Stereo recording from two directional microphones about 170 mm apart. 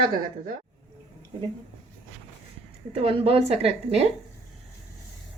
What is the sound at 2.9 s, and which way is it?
A woman's voice, 35° right (ahead or behind).